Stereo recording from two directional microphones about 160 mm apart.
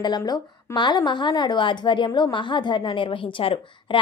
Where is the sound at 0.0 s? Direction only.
25° left (ahead or behind).